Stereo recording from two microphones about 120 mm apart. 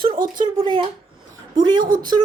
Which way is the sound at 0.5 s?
40° right (ahead or behind).